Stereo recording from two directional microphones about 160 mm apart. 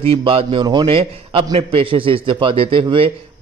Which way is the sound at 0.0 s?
35° right (ahead or behind).